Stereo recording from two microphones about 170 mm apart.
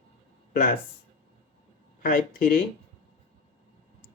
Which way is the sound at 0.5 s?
55° left (ahead or behind).